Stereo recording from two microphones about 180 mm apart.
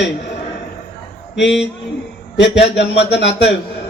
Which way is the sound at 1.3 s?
75° left (ahead or behind).